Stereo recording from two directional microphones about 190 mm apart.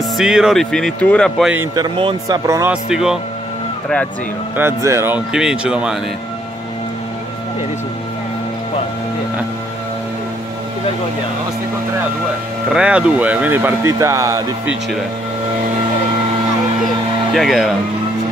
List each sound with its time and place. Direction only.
0.2 s speech: 5° right (ahead or behind)
1.8 s speech: 25° right (ahead or behind)
2.7 s speech: 5° right (ahead or behind)
4.6 s speech: 15° right (ahead or behind)
12.7 s speech: 5° right (ahead or behind)
17.3 s speech: centre (ahead or behind)